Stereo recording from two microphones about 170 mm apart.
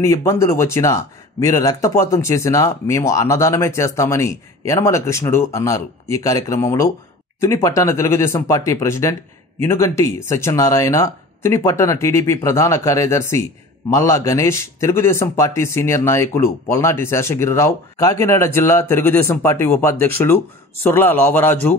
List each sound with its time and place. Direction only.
0.0 s speech: 15° left (ahead or behind)